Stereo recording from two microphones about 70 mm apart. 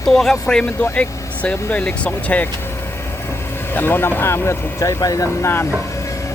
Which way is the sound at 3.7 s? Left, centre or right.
Left.